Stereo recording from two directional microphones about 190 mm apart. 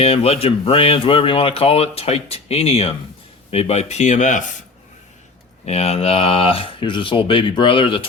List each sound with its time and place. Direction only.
0.0 s speech: 30° left (ahead or behind)
5.6 s speech: 35° left (ahead or behind)